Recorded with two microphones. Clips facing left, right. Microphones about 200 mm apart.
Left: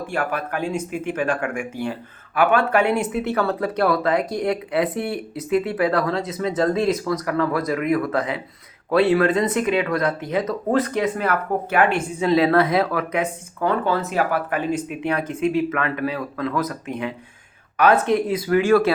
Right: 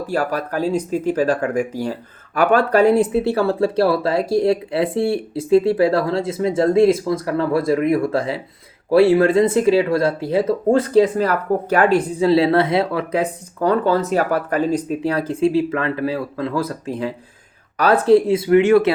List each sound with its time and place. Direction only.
0.1 s speech: 35° right (ahead or behind)